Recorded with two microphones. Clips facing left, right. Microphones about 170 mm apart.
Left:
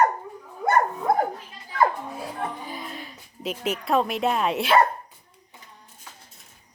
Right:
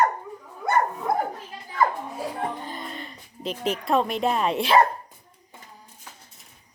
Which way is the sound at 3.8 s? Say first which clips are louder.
Even; centre (ahead or behind).